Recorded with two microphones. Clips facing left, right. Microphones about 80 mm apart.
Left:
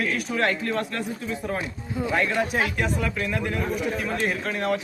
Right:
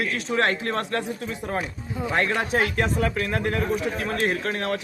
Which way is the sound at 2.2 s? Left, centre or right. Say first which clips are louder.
Right 1 dB; right.